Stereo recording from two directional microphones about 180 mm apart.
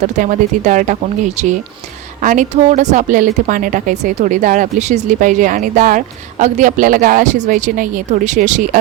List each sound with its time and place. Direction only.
0.2 s speech: 45° right (ahead or behind)
2.2 s speech: 45° right (ahead or behind)